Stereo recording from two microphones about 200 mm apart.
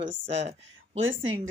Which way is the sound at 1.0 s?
70° right (ahead or behind).